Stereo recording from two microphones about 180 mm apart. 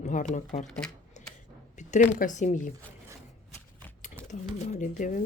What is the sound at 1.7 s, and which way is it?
Speech, 40° left (ahead or behind).